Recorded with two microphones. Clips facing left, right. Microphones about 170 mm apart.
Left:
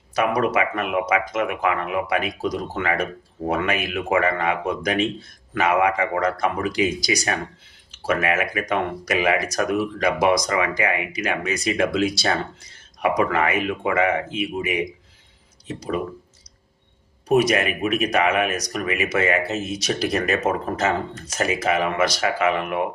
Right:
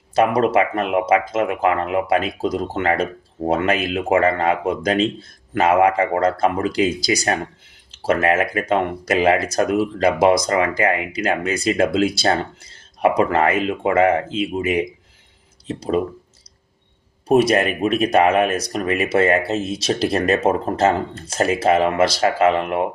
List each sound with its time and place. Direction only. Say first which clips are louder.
0.2 s speech: right 4 dB; 30° right (ahead or behind)
17.2 s speech: right 3 dB; 30° right (ahead or behind)